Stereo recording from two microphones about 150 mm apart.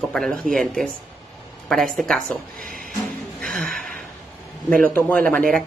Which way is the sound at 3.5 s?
70° right (ahead or behind).